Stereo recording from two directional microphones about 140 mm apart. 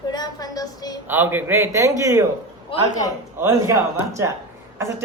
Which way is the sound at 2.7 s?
40° left (ahead or behind).